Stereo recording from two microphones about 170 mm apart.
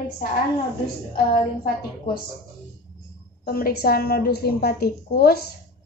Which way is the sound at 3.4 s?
60° left (ahead or behind).